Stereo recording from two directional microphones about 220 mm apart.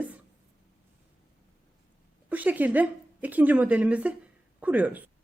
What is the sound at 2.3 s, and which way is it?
A woman's voice, 5° right (ahead or behind).